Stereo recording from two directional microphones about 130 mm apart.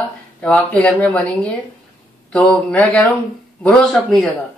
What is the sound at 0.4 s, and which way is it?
A man's voice, 10° left (ahead or behind).